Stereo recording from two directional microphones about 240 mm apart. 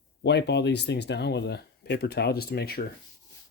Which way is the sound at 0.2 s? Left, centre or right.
Left.